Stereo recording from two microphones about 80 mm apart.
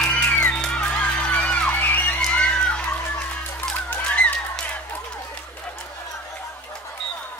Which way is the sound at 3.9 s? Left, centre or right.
Centre.